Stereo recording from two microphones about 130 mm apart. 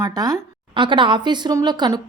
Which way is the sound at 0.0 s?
30° right (ahead or behind).